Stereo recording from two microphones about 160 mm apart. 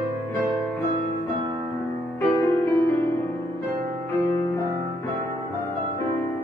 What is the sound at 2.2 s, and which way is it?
Music, 20° left (ahead or behind).